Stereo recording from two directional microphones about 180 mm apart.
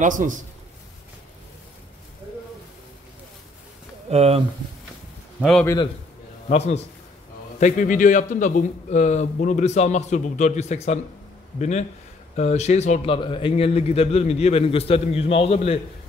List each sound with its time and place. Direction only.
0.0 s a man's voice: 45° right (ahead or behind)
4.1 s speech: 35° right (ahead or behind)
5.4 s a man's voice: centre (ahead or behind)
6.5 s a man's voice: 35° left (ahead or behind)
7.6 s a man's voice: 45° left (ahead or behind)
12.4 s a man's voice: 40° left (ahead or behind)